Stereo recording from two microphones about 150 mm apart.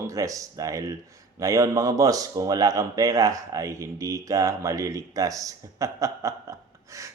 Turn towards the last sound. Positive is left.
turn(degrees=-20)  # may be behind; listen again after turning